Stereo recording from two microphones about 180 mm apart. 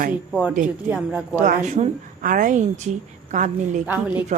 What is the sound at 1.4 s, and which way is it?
A woman's voice, 40° right (ahead or behind).